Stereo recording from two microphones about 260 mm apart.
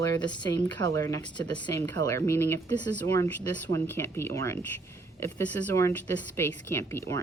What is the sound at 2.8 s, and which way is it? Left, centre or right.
Speech, right.